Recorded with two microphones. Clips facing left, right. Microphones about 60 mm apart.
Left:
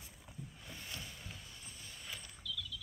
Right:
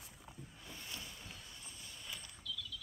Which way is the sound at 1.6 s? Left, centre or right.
Centre.